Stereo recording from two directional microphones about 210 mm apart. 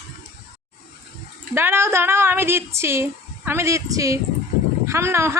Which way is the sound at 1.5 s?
10° right (ahead or behind).